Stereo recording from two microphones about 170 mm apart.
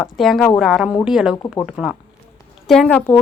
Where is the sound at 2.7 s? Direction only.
5° left (ahead or behind).